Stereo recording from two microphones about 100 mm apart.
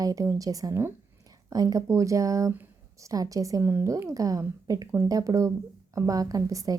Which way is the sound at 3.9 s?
30° right (ahead or behind).